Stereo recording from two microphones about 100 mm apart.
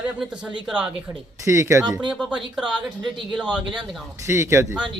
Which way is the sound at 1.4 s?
30° right (ahead or behind).